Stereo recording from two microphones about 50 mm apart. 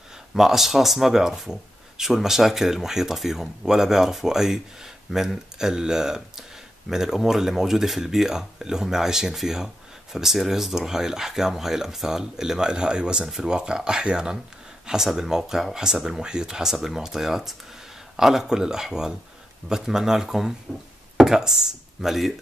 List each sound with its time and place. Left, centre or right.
0.3 s speech: centre